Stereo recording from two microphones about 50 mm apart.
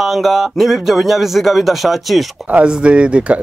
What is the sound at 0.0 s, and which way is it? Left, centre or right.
Speech, centre.